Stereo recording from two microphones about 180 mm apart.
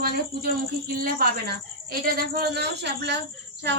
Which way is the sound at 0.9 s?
55° right (ahead or behind).